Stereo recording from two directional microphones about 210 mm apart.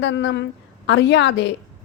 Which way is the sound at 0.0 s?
60° left (ahead or behind).